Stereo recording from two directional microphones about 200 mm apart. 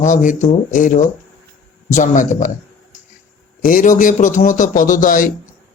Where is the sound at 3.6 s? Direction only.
40° left (ahead or behind).